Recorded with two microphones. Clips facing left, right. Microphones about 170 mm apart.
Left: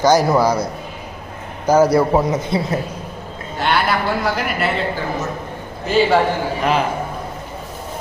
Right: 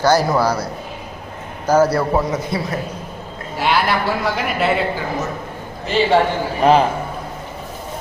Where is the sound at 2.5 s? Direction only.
25° left (ahead or behind).